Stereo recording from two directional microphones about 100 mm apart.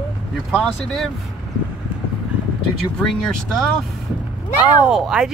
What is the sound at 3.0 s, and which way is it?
Speech, 5° left (ahead or behind).